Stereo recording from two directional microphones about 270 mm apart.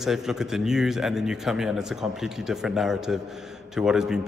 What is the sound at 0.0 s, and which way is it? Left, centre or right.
A man's voice, centre.